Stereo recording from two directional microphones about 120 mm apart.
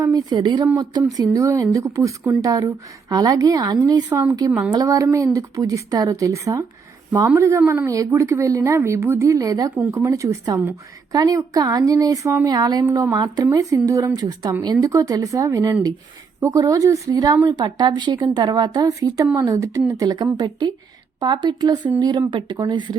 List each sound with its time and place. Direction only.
0.0 s a woman's voice: 30° right (ahead or behind)